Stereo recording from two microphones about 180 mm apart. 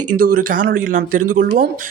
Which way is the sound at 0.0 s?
50° right (ahead or behind).